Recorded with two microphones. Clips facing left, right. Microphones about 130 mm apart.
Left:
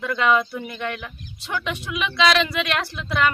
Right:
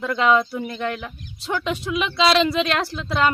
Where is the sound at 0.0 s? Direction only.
25° right (ahead or behind).